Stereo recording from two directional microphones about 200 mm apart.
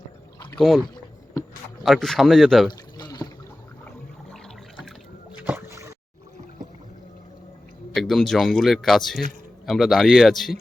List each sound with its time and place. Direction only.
0.9 s rowboat: 15° left (ahead or behind)
1.8 s speech: centre (ahead or behind)
2.6 s pour: 20° left (ahead or behind)
5.4 s boat: 10° right (ahead or behind)
7.9 s speech: centre (ahead or behind)